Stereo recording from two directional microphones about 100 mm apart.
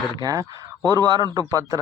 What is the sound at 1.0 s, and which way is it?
Speech, 40° right (ahead or behind).